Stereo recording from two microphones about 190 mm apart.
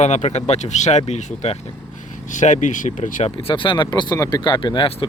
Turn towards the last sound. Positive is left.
turn(degrees=25)  # may be behind; listen again after turning